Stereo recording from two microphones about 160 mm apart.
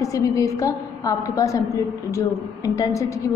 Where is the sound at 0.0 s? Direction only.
20° left (ahead or behind).